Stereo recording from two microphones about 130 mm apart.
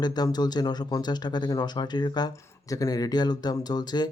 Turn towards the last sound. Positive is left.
turn(degrees=30)  # may be behind; listen again after turning